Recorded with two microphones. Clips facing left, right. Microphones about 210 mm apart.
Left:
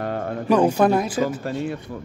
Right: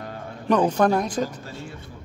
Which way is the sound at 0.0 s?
70° left (ahead or behind).